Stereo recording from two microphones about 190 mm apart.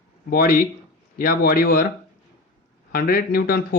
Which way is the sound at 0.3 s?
50° left (ahead or behind).